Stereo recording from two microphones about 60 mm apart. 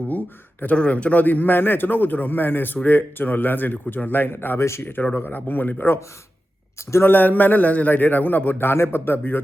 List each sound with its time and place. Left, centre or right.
0.1 s a man's voice: left
6.7 s speech: left
7.1 s a man's voice: left
8.5 s a man's voice: left